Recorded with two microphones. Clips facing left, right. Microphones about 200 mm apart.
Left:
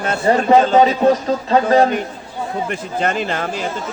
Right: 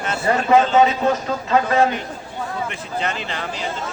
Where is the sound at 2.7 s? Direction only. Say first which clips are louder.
Left 5 dB; 50° left (ahead or behind).